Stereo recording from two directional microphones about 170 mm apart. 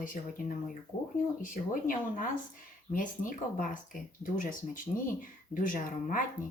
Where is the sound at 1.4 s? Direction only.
50° left (ahead or behind).